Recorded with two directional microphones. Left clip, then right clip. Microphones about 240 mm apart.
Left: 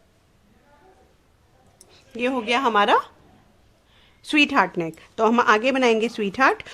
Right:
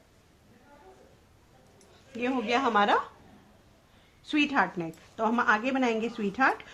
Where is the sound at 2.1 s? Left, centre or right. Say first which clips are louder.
Left 6 dB; left.